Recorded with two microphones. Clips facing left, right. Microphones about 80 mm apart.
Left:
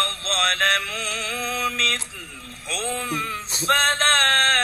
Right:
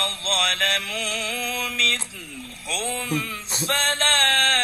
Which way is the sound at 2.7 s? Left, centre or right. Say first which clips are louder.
Even; left.